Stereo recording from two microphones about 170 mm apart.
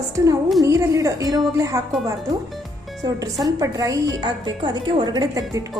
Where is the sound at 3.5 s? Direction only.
20° right (ahead or behind).